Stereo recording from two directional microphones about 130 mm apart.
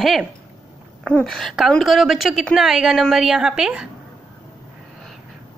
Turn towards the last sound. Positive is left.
turn(degrees=-5)  # may be behind; listen again after turning